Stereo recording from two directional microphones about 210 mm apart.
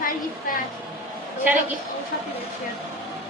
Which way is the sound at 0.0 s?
40° left (ahead or behind).